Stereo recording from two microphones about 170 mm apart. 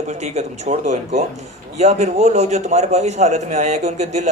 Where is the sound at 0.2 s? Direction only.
40° right (ahead or behind).